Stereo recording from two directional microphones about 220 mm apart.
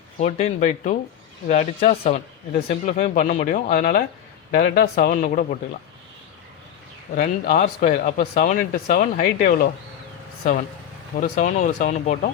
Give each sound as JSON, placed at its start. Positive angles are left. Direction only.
{"t": 0.2, "sound": "speech", "side_deg": 30}
{"t": 7.2, "sound": "speech", "side_deg": 35}
{"t": 11.2, "sound": "speech", "side_deg": 35}